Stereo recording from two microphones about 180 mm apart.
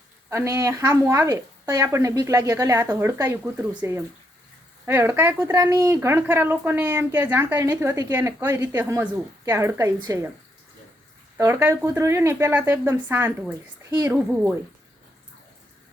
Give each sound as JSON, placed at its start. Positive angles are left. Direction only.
{"t": 0.3, "sound": "speech", "side_deg": -15}
{"t": 11.3, "sound": "speech", "side_deg": -15}